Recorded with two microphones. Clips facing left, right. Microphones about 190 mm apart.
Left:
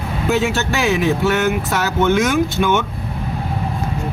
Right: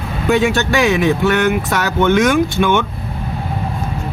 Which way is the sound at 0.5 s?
70° right (ahead or behind).